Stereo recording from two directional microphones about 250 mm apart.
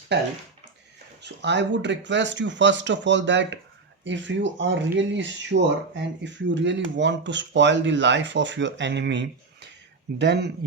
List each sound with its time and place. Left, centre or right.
1.2 s speech: right